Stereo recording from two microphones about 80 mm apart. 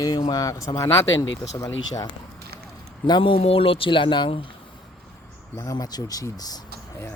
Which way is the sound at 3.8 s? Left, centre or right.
Left.